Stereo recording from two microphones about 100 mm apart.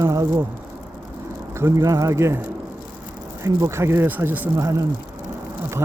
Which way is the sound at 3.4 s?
30° right (ahead or behind).